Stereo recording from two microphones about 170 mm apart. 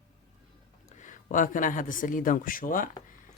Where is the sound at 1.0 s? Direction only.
45° left (ahead or behind).